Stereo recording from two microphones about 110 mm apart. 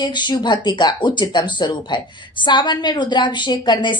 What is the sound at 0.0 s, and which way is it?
Speech, 45° left (ahead or behind).